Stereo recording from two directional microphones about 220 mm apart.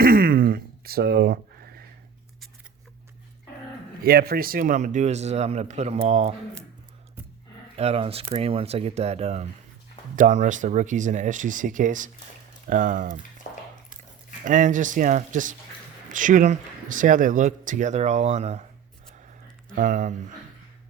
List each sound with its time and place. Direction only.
0.0 s a sound: 40° right (ahead or behind)
4.0 s speech: 45° right (ahead or behind)
7.8 s speech: 25° right (ahead or behind)
13.5 s dishes: 35° left (ahead or behind)
14.4 s speech: 35° right (ahead or behind)
19.7 s speech: 35° right (ahead or behind)